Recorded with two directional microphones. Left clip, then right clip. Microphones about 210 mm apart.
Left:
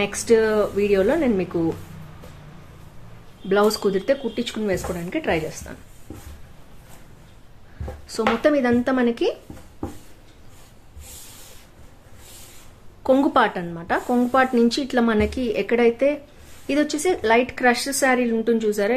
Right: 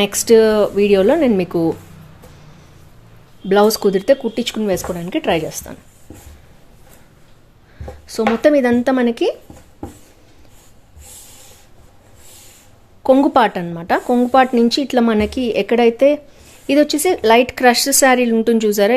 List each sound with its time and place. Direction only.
0.0 s speech: 40° right (ahead or behind)
3.4 s speech: 35° right (ahead or behind)
8.1 s speech: 30° right (ahead or behind)
13.0 s speech: 30° right (ahead or behind)